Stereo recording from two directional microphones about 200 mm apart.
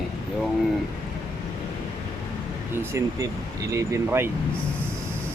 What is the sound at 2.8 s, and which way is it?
Speech, 15° right (ahead or behind).